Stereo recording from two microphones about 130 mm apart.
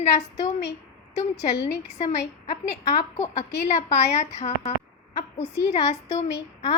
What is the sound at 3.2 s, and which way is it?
A woman's voice, 55° left (ahead or behind).